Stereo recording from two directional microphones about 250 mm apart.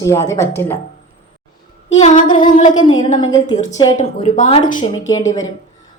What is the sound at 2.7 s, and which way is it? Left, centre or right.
Speech, centre.